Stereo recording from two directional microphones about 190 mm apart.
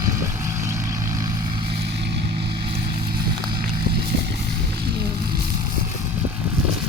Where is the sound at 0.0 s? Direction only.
15° right (ahead or behind).